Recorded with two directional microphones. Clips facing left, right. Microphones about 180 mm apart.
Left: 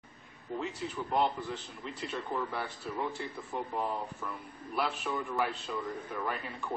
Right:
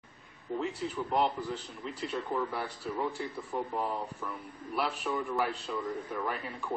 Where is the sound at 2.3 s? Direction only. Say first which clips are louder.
Right 2 dB; 5° right (ahead or behind).